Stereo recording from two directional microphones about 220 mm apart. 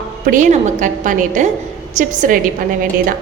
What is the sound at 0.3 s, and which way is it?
A woman's voice, 35° right (ahead or behind).